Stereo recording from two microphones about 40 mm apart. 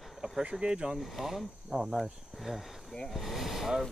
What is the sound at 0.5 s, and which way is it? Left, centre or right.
Speech, right.